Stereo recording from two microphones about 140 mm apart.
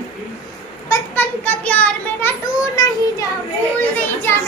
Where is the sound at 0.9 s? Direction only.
15° left (ahead or behind).